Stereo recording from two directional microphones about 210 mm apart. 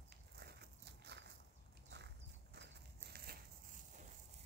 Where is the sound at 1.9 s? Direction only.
55° right (ahead or behind).